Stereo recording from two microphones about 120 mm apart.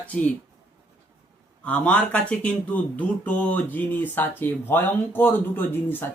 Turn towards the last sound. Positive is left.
turn(degrees=15)  # may be behind; listen again after turning